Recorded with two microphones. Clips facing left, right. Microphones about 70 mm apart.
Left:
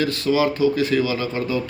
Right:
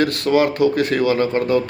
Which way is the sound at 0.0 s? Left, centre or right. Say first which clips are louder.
Right 3 dB; right.